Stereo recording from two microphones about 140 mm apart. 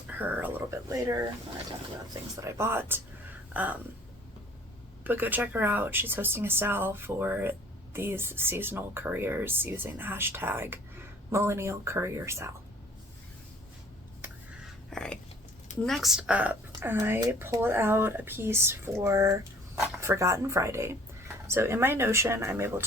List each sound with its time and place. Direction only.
0.2 s speech: 10° right (ahead or behind)
0.7 s speech: 25° right (ahead or behind)
2.3 s speech: 20° right (ahead or behind)
5.0 s speech: 15° right (ahead or behind)
14.9 s biting: 5° left (ahead or behind)
15.9 s speech: centre (ahead or behind); by 22.9 s 20° right (ahead or behind)